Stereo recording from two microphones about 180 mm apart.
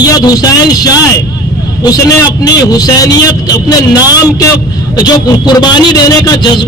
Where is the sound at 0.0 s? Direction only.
20° left (ahead or behind).